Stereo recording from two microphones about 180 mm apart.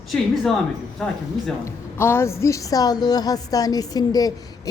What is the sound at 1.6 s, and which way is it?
A woman's voice, 15° left (ahead or behind).